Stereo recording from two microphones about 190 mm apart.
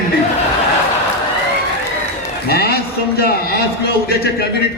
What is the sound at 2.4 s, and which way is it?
A man's voice, 55° left (ahead or behind).